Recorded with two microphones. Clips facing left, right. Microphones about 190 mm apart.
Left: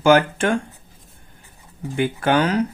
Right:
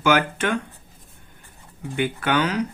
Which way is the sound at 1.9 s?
30° left (ahead or behind).